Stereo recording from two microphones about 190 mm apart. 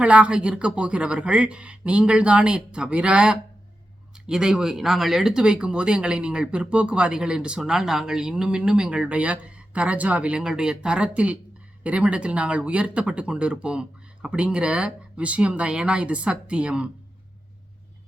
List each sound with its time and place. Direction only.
0.0 s speech: 5° right (ahead or behind)